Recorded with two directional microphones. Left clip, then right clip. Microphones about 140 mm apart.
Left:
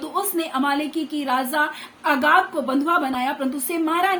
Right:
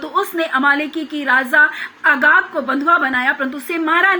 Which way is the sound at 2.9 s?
35° left (ahead or behind).